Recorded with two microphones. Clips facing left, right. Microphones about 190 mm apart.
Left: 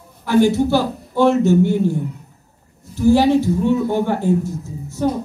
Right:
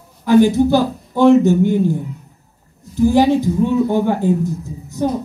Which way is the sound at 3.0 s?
15° right (ahead or behind).